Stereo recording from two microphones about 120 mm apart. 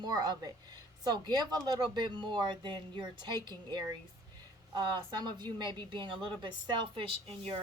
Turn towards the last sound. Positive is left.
turn(degrees=-50)  # may be behind; listen again after turning